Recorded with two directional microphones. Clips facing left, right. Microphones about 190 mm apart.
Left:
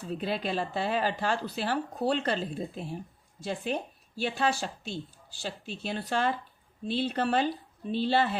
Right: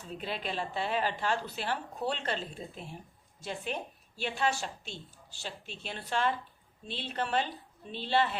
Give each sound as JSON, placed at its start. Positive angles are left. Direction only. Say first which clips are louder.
{"t": 0.2, "sound": "speech", "louder": "left 4 dB", "side_deg": 40}